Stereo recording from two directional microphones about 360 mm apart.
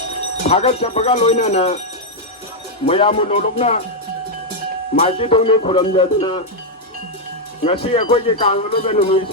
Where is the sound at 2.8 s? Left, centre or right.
Centre.